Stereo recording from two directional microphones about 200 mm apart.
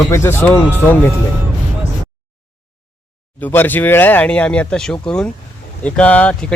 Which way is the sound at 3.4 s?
10° left (ahead or behind).